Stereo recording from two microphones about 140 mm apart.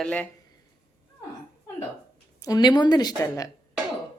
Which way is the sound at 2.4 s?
30° left (ahead or behind).